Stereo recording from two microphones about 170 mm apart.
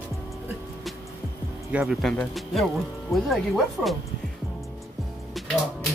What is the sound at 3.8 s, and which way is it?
Speech, 5° right (ahead or behind).